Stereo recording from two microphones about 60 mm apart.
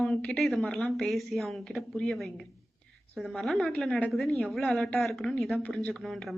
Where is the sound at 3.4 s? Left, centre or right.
Centre.